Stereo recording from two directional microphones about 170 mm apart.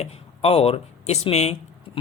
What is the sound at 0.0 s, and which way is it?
Speech, 35° left (ahead or behind).